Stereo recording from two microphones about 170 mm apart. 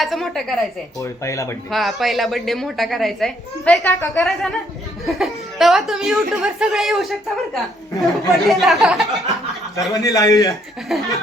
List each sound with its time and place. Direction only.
0.0 s a woman's voice: centre (ahead or behind)
0.9 s speech: 20° left (ahead or behind)
1.7 s a woman's voice: centre (ahead or behind)
3.8 s a woman's voice: 20° left (ahead or behind)
4.2 s a woman's voice: centre (ahead or behind)
9.9 s speech: 20° left (ahead or behind)
10.5 s a woman's voice: centre (ahead or behind)